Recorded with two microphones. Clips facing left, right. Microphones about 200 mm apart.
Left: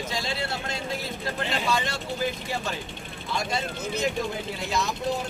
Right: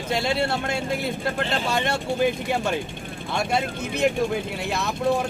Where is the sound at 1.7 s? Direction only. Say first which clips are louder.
Right 4 dB; 60° right (ahead or behind).